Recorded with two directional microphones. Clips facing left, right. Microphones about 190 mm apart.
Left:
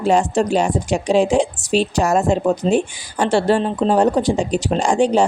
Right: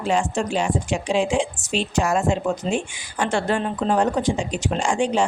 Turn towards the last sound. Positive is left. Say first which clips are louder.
# left 6 dB
turn(degrees=40)  # may be behind; listen again after turning